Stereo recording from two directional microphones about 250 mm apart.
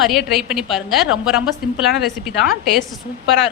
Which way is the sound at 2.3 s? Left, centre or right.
Left.